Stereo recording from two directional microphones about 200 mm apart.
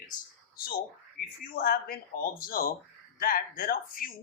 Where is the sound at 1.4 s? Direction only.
45° left (ahead or behind).